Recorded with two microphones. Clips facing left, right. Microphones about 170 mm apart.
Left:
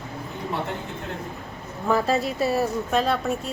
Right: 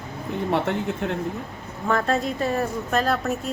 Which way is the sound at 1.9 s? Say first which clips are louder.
Left 1 dB; 5° left (ahead or behind).